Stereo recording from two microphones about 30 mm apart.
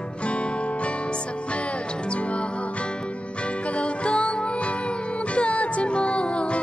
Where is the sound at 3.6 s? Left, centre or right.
Left.